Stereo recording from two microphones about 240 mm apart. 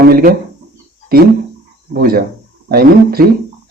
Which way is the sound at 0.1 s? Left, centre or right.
Right.